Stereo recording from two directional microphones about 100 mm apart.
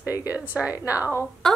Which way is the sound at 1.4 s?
5° left (ahead or behind).